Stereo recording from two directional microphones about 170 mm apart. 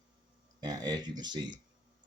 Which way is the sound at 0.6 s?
25° right (ahead or behind).